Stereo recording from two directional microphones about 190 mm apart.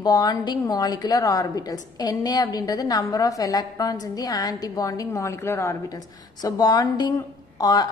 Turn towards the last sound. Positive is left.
turn(degrees=20)  # may be behind; listen again after turning